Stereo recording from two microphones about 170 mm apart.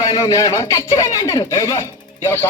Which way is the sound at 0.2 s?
20° left (ahead or behind).